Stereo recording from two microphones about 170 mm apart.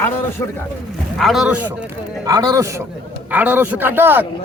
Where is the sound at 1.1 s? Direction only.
Centre (ahead or behind).